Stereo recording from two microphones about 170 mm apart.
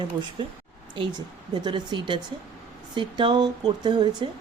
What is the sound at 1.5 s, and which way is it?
Speech, 25° right (ahead or behind).